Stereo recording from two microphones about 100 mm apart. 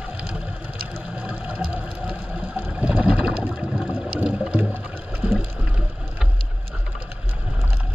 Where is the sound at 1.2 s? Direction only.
15° right (ahead or behind).